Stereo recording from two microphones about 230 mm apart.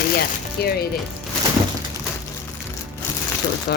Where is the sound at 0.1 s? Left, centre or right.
Left.